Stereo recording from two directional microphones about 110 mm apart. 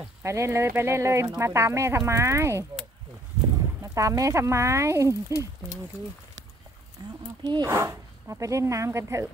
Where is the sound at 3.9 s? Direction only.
30° right (ahead or behind).